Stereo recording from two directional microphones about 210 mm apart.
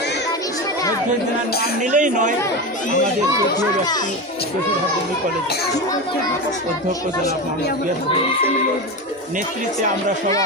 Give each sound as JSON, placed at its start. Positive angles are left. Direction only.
{"t": 1.9, "sound": "speech", "side_deg": -35}